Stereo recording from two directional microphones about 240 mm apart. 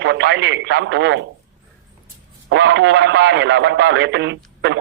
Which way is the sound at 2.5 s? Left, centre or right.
Right.